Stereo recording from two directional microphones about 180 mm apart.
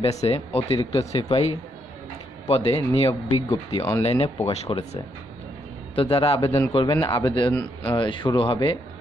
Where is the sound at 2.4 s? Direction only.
35° left (ahead or behind).